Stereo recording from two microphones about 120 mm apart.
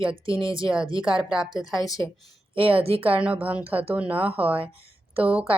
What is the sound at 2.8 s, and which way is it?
Speech, 55° right (ahead or behind).